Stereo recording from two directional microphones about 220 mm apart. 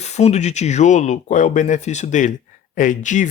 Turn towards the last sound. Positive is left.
turn(degrees=35)  # may be behind; listen again after turning